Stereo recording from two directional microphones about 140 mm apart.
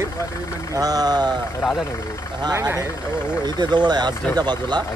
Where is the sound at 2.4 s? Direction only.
25° right (ahead or behind).